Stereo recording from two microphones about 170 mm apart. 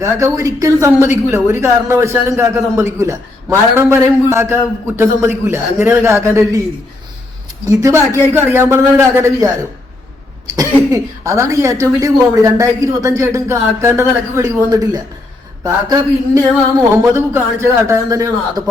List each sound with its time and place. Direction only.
0.0 s a woman's voice: 20° right (ahead or behind)
7.7 s a woman's voice: 20° right (ahead or behind)